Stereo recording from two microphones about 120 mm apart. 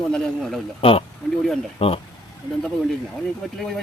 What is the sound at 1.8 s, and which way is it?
Speech, 55° left (ahead or behind).